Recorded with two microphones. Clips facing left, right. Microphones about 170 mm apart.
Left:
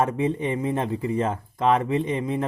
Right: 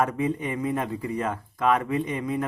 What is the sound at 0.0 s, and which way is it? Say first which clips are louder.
Speech: left 2 dB; 25° left (ahead or behind).